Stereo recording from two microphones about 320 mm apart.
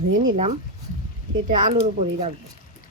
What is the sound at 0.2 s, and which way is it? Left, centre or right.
Speech, centre.